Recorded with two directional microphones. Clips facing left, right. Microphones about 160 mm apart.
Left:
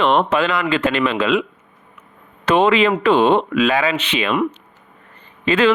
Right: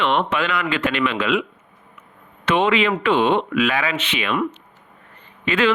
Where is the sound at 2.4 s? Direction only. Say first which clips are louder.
Left 4 dB; 40° left (ahead or behind).